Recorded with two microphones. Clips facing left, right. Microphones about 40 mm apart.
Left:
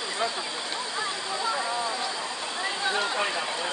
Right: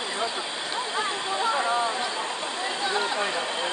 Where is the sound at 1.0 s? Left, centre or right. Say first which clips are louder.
Right 4 dB; right.